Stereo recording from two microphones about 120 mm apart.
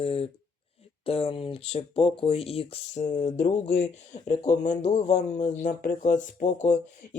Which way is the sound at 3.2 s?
85° left.